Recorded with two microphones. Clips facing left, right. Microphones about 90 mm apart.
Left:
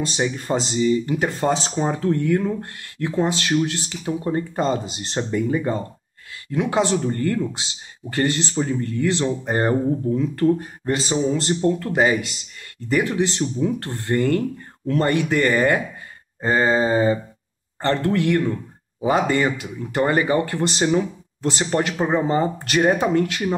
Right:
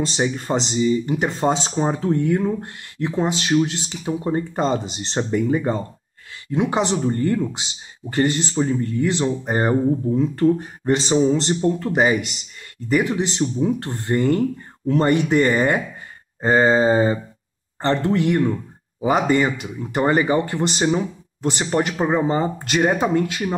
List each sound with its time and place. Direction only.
0.2 s speech: 20° right (ahead or behind)
10.9 s speech: 25° right (ahead or behind)